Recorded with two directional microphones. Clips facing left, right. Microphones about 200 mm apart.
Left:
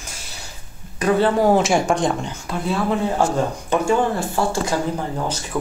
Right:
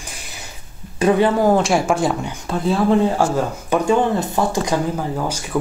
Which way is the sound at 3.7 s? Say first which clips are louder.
Right 3 dB; 20° right (ahead or behind).